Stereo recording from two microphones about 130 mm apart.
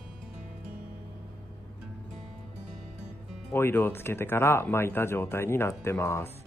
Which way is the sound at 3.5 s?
15° left (ahead or behind).